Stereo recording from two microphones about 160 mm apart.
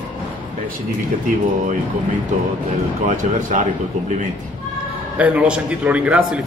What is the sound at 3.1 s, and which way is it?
Speech, 50° right (ahead or behind).